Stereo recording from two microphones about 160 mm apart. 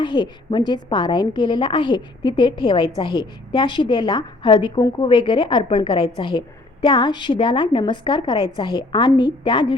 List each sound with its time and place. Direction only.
0.0 s a woman's voice: 30° left (ahead or behind)